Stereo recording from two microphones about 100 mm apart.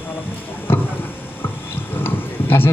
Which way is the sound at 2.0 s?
20° left (ahead or behind).